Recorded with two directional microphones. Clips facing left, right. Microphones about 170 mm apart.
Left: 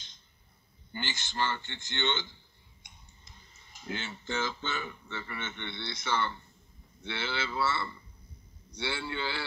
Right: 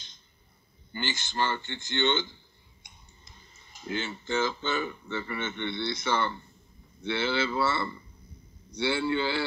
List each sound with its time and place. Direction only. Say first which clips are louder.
1.0 s speech: right 3 dB; 40° right (ahead or behind)
4.0 s speech: right 6 dB; 40° right (ahead or behind)
8.7 s a man's voice: right 8 dB; 25° right (ahead or behind)